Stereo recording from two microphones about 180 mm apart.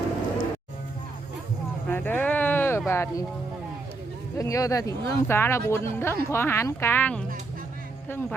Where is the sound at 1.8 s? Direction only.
10° left (ahead or behind).